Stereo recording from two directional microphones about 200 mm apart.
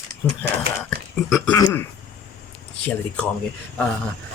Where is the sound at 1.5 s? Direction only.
15° left (ahead or behind).